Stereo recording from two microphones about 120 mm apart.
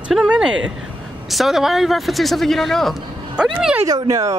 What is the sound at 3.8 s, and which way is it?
Speech, 30° right (ahead or behind).